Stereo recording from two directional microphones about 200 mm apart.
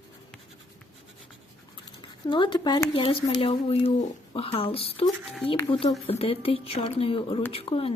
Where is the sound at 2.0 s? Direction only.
25° left (ahead or behind).